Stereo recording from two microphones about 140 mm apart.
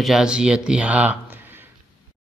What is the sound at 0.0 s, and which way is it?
A man's voice, 5° right (ahead or behind).